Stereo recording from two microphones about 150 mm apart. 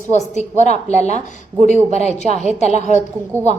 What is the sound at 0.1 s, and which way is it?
A woman's voice, 50° left (ahead or behind).